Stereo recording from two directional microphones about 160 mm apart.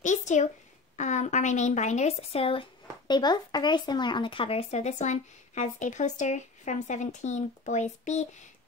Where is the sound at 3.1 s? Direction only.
25° left (ahead or behind).